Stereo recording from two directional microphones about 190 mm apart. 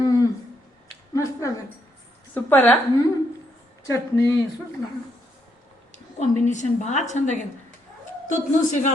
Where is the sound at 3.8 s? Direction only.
15° left (ahead or behind).